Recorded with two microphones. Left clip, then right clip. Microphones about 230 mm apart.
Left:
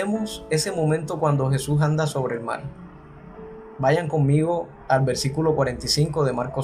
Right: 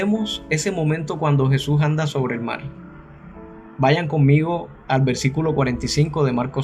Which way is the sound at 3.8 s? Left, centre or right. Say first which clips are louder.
Right 2 dB; right.